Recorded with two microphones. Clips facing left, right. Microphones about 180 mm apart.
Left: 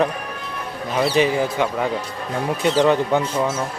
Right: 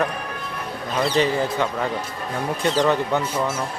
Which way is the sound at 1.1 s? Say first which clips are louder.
Left 1 dB; 15° left (ahead or behind).